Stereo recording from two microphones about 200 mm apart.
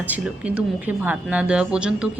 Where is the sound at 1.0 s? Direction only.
5° right (ahead or behind).